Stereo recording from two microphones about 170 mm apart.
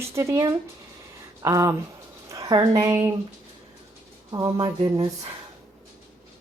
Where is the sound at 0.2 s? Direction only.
15° right (ahead or behind).